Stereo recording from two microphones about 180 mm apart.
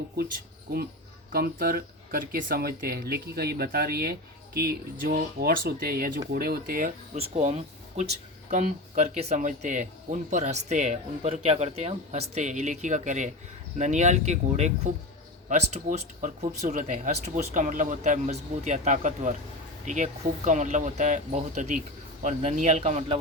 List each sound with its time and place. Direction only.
1.3 s speech: 55° right (ahead or behind)
7.2 s speech: 35° right (ahead or behind)